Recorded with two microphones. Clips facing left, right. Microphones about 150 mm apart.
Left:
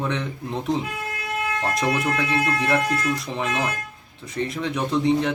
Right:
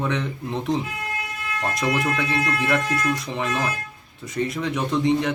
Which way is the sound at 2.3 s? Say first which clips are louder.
Left 1 dB; 30° left (ahead or behind).